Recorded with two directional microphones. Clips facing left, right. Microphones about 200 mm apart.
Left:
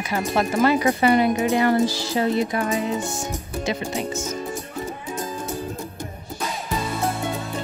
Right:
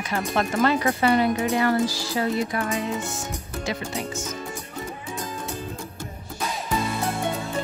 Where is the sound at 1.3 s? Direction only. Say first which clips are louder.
Left 3 dB; 20° left (ahead or behind).